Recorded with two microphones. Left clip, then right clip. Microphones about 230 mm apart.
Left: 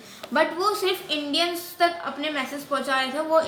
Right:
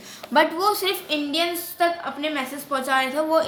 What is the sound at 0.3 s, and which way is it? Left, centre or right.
A woman's voice, right.